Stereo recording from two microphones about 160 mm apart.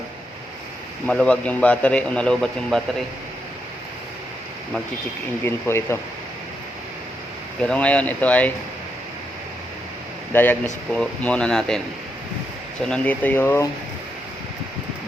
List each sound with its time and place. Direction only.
1.0 s a man's voice: 5° left (ahead or behind)
5.6 s speech: 15° left (ahead or behind)
7.6 s speech: 5° left (ahead or behind)
10.3 s speech: 10° left (ahead or behind)
12.8 s speech: 10° left (ahead or behind)